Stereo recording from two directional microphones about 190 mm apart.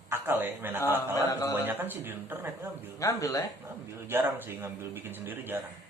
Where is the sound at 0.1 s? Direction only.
10° right (ahead or behind).